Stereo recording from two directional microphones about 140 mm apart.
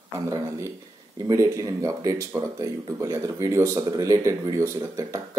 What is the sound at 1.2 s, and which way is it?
Speech, 20° right (ahead or behind).